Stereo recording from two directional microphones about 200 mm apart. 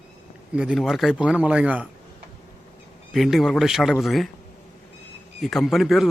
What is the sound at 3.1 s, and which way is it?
Speech, centre (ahead or behind).